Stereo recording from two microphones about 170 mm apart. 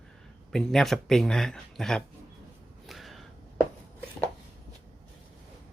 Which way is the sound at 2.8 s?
Centre (ahead or behind).